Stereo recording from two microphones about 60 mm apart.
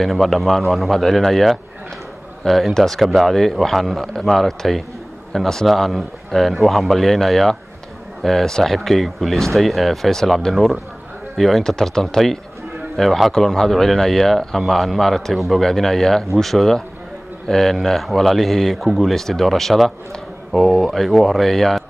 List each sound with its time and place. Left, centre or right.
0.0 s speech: centre